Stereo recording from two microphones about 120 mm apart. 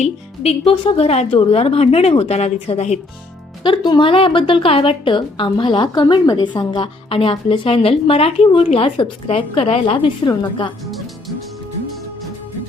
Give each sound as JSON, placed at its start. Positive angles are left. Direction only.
{"t": 0.0, "sound": "speech", "side_deg": 55}
{"t": 3.6, "sound": "a woman's voice", "side_deg": 40}
{"t": 10.9, "sound": "music", "side_deg": 0}